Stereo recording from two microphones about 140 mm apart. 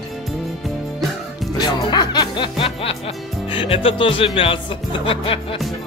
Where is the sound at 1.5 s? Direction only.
30° left (ahead or behind).